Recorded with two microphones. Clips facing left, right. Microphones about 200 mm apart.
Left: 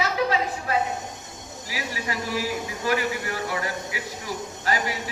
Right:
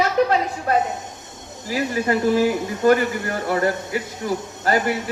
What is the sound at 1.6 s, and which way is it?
A man's voice, 50° right (ahead or behind).